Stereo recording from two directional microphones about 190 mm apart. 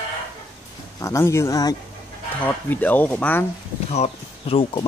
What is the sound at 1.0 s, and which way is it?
Speech, 15° left (ahead or behind).